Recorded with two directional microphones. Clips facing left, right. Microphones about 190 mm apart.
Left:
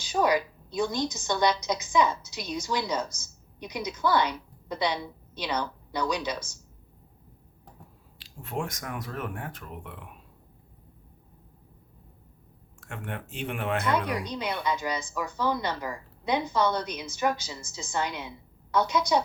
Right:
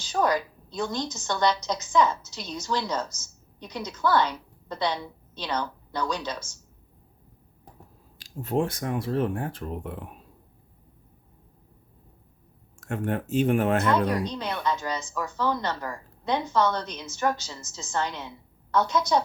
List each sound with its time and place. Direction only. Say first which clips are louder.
0.0 s a woman's voice: even; 10° left (ahead or behind)
8.2 s speech: right 7 dB; 40° right (ahead or behind)
12.8 s speech: right 9 dB; 40° right (ahead or behind)
14.3 s speech: right 1 dB; 10° left (ahead or behind)